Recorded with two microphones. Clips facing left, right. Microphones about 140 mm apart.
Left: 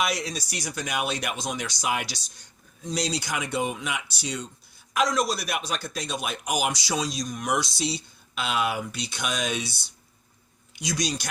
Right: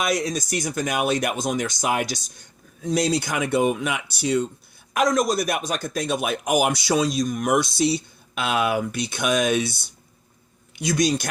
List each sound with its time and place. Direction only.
0.0 s speech: 50° right (ahead or behind)